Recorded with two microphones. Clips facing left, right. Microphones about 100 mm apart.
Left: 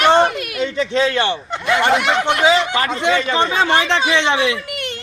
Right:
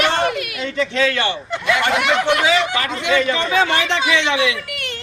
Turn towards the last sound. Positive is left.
turn(degrees=35)  # may be behind; listen again after turning